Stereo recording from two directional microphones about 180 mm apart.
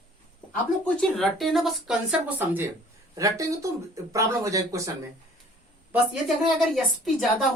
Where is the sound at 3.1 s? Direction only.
20° right (ahead or behind).